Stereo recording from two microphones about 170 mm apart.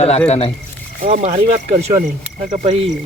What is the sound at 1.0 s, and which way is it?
Speech, 40° right (ahead or behind).